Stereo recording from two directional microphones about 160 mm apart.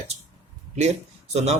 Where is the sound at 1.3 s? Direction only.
40° right (ahead or behind).